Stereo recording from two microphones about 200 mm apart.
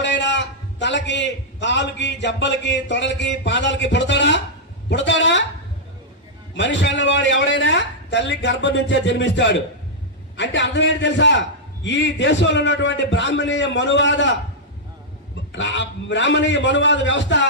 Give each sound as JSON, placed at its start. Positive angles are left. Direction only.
{"t": 0.0, "sound": "a man's voice", "side_deg": 60}
{"t": 6.5, "sound": "a man's voice", "side_deg": 60}
{"t": 15.5, "sound": "a man's voice", "side_deg": 65}